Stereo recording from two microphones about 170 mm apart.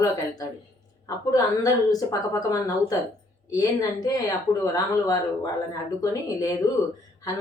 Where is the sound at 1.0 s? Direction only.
20° left (ahead or behind).